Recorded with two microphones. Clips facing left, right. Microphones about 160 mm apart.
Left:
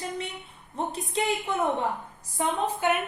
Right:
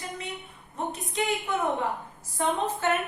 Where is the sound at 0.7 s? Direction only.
30° left (ahead or behind).